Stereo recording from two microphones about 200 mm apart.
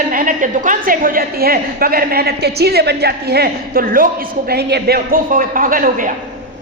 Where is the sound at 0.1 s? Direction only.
40° right (ahead or behind).